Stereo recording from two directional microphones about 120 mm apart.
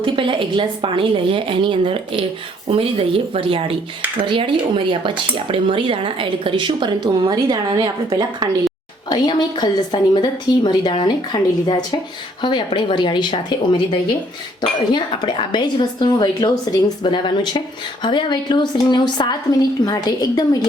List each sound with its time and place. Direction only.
0.0 s speech: 45° right (ahead or behind); by 8.7 s 30° right (ahead or behind)
9.0 s a woman's voice: 35° left (ahead or behind)
14.9 s a woman's voice: 40° left (ahead or behind)